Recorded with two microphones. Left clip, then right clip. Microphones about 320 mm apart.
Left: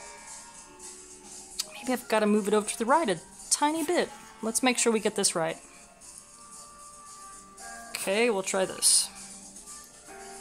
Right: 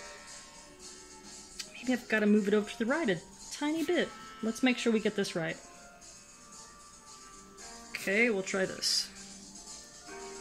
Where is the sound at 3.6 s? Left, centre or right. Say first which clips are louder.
Left 5 dB; left.